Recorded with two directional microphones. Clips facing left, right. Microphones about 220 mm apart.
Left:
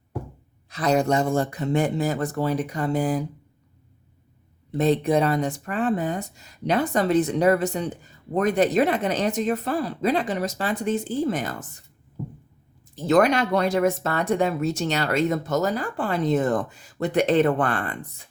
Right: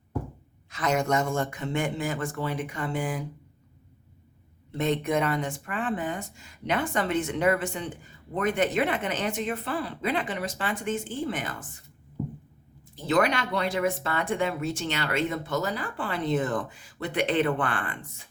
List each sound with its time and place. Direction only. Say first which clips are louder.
0.7 s speech: left 5 dB; 35° left (ahead or behind)
4.8 s speech: left 5 dB; 35° left (ahead or behind)
13.0 s speech: left 6 dB; 45° left (ahead or behind)